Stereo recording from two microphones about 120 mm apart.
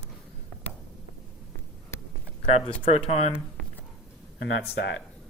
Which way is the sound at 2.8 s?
55° left (ahead or behind).